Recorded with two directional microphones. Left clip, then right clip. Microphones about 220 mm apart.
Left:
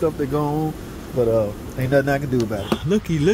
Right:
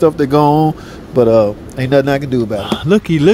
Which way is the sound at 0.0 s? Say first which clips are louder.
Right 11 dB; 45° right (ahead or behind).